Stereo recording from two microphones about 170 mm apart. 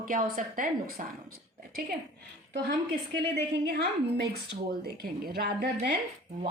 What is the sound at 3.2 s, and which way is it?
A woman's voice, 80° right.